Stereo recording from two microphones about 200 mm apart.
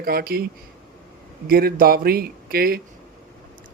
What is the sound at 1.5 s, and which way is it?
Speech, 50° right (ahead or behind).